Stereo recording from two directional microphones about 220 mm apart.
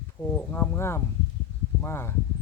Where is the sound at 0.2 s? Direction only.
10° left (ahead or behind).